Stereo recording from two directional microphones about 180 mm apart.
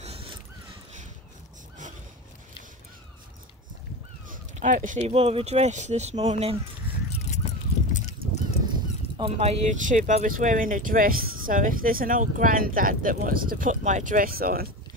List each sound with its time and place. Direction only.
0.0 s dog: 35° right (ahead or behind)
4.3 s speech: 45° right (ahead or behind)
7.2 s a sound: 40° left (ahead or behind)
8.6 s speech: 25° right (ahead or behind); by 14.7 s 55° right (ahead or behind)